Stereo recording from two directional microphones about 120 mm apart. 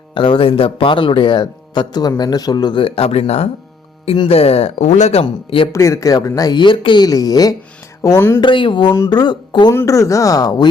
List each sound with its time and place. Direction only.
0.1 s speech: 45° left (ahead or behind); by 5.2 s 70° left (ahead or behind)
5.2 s speech: 50° left (ahead or behind)
5.7 s speech: 25° left (ahead or behind)
8.4 s speech: 45° left (ahead or behind)
9.7 s speech: 25° left (ahead or behind)